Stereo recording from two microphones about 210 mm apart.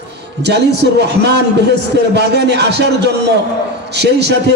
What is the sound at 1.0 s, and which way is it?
A man's voice, 55° right (ahead or behind).